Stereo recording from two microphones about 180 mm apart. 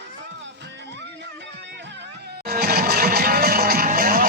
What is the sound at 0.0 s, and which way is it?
Music, 85° right.